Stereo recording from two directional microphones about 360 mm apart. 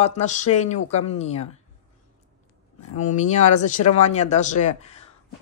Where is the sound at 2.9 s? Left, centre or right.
Centre.